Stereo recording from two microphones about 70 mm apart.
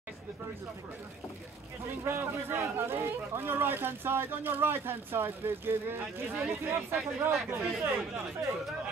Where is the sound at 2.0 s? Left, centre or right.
Right.